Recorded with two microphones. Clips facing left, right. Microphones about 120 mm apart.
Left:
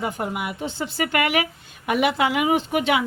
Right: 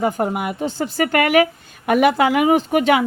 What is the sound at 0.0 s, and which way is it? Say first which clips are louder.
A woman's voice: right 7 dB; 45° right (ahead or behind).